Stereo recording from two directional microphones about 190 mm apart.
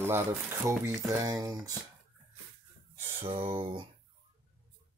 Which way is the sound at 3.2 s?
30° right (ahead or behind).